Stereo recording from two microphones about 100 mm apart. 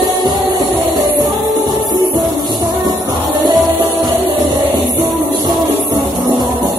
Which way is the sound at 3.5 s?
Centre (ahead or behind).